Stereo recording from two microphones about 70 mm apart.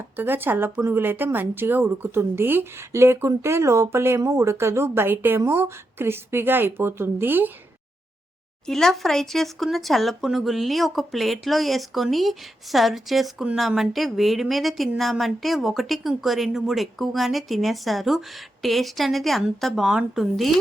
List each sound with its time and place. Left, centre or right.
0.2 s speech: right
4.2 s speech: right
8.6 s speech: centre